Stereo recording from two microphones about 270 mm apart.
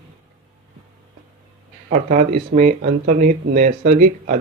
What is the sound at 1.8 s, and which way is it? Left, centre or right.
A man's voice, right.